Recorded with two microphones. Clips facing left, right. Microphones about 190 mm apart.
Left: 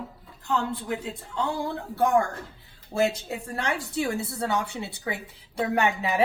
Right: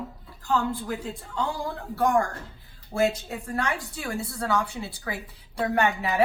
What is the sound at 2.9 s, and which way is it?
A woman's voice, 25° left (ahead or behind).